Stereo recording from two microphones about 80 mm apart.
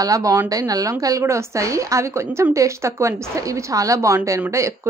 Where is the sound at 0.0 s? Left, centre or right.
Right.